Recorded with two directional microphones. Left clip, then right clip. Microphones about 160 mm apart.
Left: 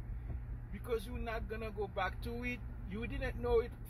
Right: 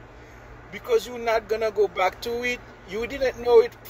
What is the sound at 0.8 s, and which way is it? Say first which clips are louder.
Speech: right 17 dB; 15° right (ahead or behind).